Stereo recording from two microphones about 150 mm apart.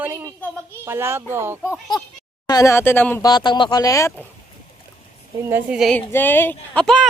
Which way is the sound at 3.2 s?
30° left (ahead or behind).